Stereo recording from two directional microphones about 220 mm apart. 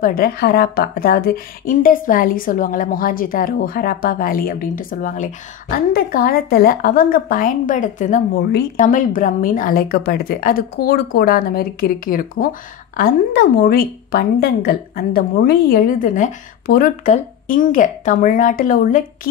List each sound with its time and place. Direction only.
0.0 s a woman's voice: 40° left (ahead or behind)